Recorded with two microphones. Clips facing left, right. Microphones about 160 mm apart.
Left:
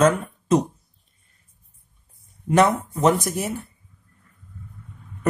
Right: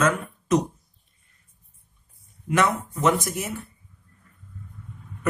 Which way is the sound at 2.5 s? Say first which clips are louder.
Left 5 dB; 35° left (ahead or behind).